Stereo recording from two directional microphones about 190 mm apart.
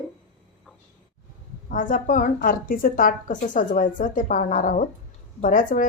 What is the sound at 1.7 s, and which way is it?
A woman's voice, 45° left (ahead or behind).